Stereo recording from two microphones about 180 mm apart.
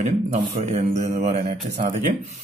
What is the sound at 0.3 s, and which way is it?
A man's voice, 40° right (ahead or behind).